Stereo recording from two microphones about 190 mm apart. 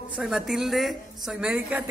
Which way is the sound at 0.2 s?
5° right (ahead or behind).